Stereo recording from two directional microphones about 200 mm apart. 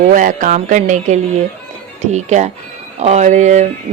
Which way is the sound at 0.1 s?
40° right (ahead or behind).